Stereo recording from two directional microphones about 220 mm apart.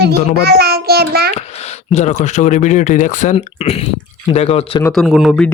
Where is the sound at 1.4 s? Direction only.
30° left (ahead or behind).